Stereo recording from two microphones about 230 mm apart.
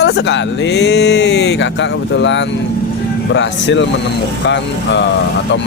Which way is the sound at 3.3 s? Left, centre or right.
Left.